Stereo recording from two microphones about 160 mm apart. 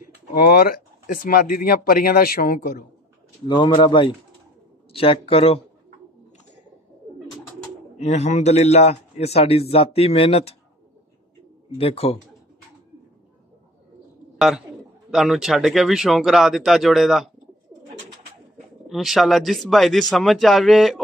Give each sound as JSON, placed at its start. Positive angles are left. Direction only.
{"t": 0.3, "sound": "speech", "side_deg": 70}
{"t": 3.4, "sound": "a man's voice", "side_deg": 30}
{"t": 8.0, "sound": "a man's voice", "side_deg": 45}
{"t": 11.8, "sound": "a man's voice", "side_deg": 35}
{"t": 15.0, "sound": "speech", "side_deg": 0}
{"t": 18.9, "sound": "speech", "side_deg": 0}